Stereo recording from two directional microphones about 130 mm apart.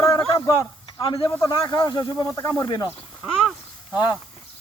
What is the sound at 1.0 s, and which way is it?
Speech, 40° left (ahead or behind).